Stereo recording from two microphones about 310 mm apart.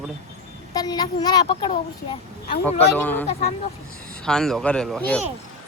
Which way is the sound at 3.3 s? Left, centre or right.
Left.